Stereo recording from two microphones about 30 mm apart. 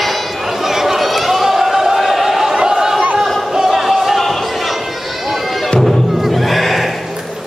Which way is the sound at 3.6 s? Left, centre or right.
Centre.